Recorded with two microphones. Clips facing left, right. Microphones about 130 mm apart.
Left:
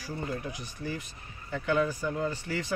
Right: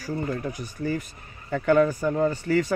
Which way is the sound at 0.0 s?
45° right (ahead or behind).